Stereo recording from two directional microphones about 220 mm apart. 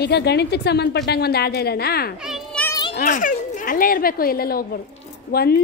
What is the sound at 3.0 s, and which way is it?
A woman's voice, 35° left (ahead or behind).